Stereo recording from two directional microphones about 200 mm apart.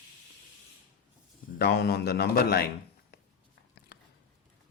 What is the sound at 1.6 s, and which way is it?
A man's voice, 50° left (ahead or behind).